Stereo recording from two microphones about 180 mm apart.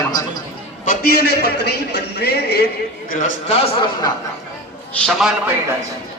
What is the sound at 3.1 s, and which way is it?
Speech, 45° left (ahead or behind).